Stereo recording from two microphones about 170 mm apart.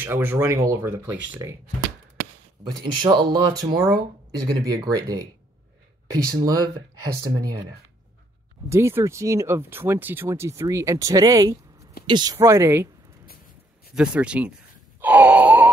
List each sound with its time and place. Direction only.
0.0 s speech: 10° right (ahead or behind)
2.8 s speech: 25° right (ahead or behind)
6.4 s speech: 20° right (ahead or behind)
8.6 s speech: 15° right (ahead or behind)
13.9 s speech: 5° right (ahead or behind)
15.0 s wail: 10° right (ahead or behind)